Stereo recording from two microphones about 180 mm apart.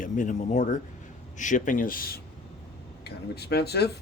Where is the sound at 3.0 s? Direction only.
65° left (ahead or behind).